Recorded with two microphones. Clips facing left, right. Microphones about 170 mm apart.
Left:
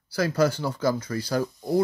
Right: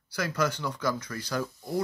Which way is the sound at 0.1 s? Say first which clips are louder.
Left 6 dB; 30° left (ahead or behind).